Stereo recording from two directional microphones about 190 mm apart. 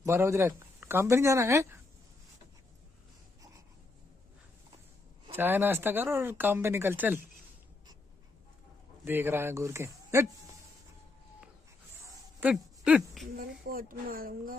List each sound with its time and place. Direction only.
0.0 s speech: 15° right (ahead or behind)
5.3 s speech: 10° right (ahead or behind)
9.0 s speech: 10° right (ahead or behind)
12.0 s a sound: 10° right (ahead or behind)
13.4 s speech: 50° right (ahead or behind)